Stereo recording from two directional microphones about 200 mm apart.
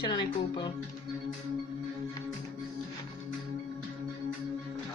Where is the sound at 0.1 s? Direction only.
20° left (ahead or behind).